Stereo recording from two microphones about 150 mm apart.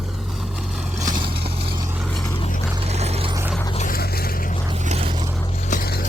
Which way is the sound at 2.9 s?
45° right (ahead or behind).